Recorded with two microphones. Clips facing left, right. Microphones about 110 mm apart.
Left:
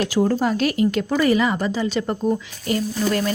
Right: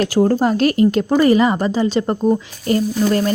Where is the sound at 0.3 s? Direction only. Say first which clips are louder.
Right 5 dB; 40° right (ahead or behind).